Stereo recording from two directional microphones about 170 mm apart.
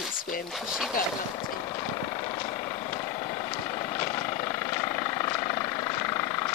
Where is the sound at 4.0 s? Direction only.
25° left (ahead or behind).